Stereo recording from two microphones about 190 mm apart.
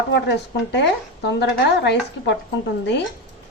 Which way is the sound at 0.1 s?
65° left (ahead or behind).